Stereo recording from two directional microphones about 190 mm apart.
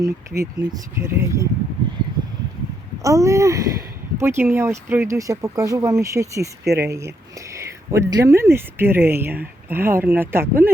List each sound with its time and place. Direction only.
0.0 s speech: 15° right (ahead or behind)
3.0 s speech: 15° right (ahead or behind)